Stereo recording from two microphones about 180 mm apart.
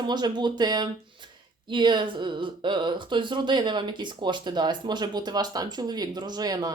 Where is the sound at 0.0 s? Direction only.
25° right (ahead or behind).